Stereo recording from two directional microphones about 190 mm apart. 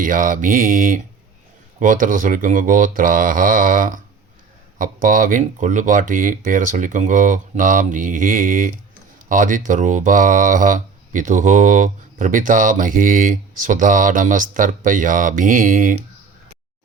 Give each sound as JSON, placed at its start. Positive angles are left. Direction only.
{"t": 0.0, "sound": "speech", "side_deg": -45}